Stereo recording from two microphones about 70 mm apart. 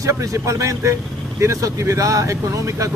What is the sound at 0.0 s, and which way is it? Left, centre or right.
Speech, right.